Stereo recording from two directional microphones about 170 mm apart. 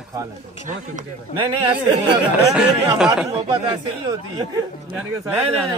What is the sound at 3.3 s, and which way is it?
Speech, 30° right (ahead or behind).